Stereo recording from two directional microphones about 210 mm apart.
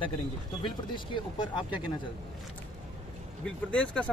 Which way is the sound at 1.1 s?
20° left (ahead or behind).